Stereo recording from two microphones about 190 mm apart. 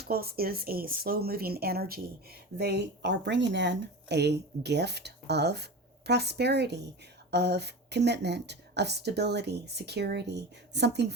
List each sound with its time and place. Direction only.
0.0 s speech: 55° right (ahead or behind)